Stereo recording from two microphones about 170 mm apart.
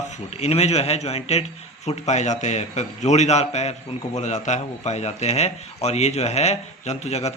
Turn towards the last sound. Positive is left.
turn(degrees=40)  # may be behind; listen again after turning